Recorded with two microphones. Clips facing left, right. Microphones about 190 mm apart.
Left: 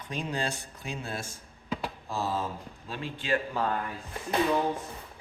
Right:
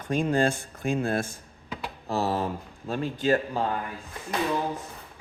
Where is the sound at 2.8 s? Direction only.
45° right (ahead or behind).